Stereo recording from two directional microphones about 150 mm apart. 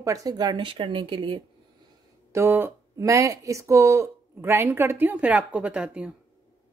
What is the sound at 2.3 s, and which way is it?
Speech, 15° right (ahead or behind).